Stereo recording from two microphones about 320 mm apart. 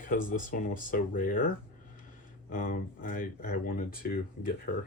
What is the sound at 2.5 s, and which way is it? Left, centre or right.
Speech, left.